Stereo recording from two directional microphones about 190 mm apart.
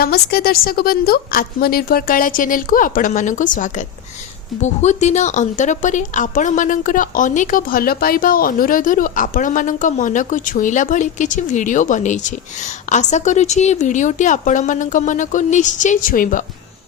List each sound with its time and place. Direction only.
0.0 s a woman's voice: 55° left (ahead or behind)